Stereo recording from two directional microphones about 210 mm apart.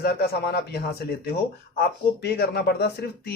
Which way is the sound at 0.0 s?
50° left (ahead or behind).